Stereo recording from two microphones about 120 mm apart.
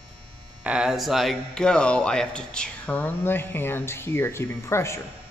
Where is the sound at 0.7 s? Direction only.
5° right (ahead or behind); by 5.0 s 25° left (ahead or behind).